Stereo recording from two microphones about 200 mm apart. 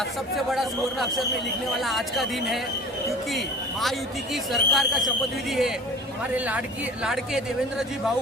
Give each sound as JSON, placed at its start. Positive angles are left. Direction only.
{"t": 0.3, "sound": "speech", "side_deg": 0}
{"t": 7.0, "sound": "speech", "side_deg": 0}